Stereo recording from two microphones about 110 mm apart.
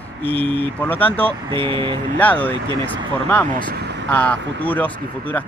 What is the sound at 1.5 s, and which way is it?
Speech, 50° right (ahead or behind).